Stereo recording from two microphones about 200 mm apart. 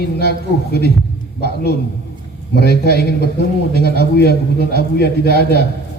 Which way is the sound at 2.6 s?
55° left (ahead or behind).